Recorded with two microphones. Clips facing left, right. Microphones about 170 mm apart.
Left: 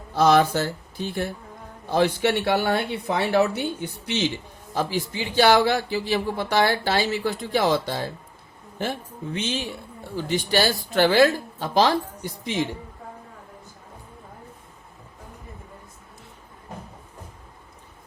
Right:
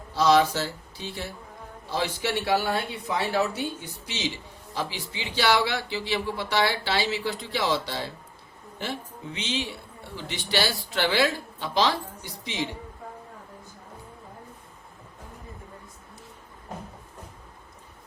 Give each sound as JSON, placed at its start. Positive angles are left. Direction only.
{"t": 0.1, "sound": "speech", "side_deg": 55}
{"t": 4.7, "sound": "speech", "side_deg": 45}